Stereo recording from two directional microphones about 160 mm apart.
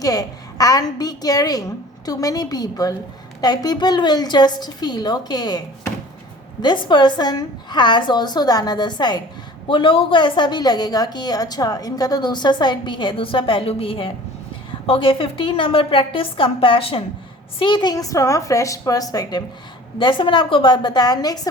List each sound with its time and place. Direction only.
0.0 s a woman's voice: 25° left (ahead or behind)